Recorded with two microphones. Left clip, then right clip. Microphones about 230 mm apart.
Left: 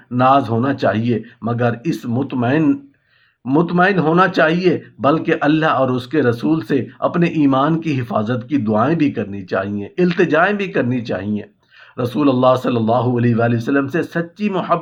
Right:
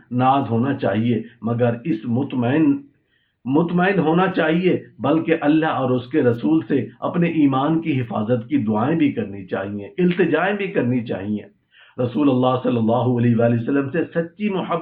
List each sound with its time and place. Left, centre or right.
0.2 s speech: left